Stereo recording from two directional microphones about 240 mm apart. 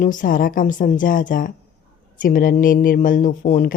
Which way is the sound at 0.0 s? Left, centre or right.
Left.